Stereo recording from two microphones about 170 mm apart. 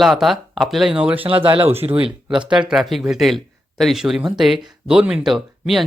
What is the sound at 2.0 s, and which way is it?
Speech, 5° right (ahead or behind).